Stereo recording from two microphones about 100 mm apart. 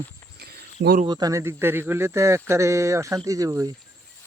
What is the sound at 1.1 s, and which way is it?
Speech, 40° right (ahead or behind).